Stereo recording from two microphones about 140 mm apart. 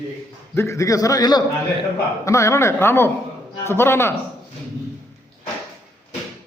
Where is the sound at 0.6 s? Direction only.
20° left (ahead or behind).